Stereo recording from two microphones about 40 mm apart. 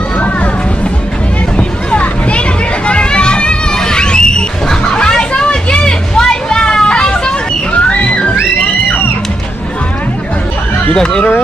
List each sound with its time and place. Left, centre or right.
1.6 s a sound: left
7.7 s music: left
10.9 s speech: left